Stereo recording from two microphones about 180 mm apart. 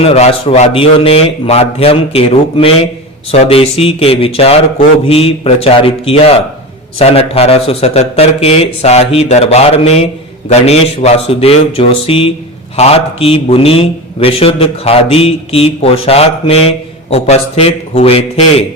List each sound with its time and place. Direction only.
0.0 s a man's voice: 35° left (ahead or behind)